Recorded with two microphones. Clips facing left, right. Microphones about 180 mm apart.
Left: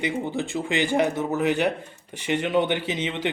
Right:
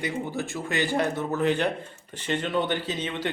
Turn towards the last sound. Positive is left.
turn(degrees=15)  # may be behind; listen again after turning